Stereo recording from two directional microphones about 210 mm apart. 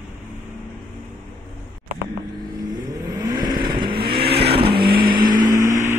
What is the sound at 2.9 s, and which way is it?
Vehicle, 20° right (ahead or behind).